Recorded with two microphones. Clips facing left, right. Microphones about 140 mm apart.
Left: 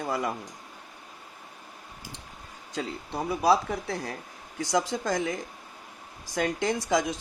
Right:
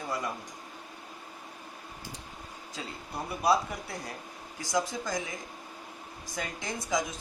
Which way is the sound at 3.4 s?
70° left (ahead or behind).